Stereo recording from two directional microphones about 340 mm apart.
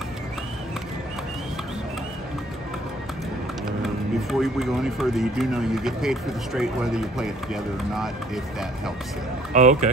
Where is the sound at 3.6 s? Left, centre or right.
Centre.